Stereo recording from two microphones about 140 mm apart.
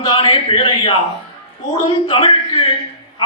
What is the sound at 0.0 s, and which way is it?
Speech, 35° left (ahead or behind).